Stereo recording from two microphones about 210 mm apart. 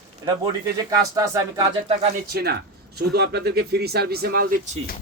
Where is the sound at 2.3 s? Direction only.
50° right (ahead or behind).